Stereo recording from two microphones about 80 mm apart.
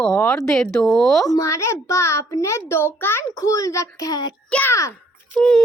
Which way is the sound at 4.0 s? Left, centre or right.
Left.